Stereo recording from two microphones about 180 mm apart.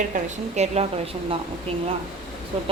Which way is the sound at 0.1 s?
40° right (ahead or behind).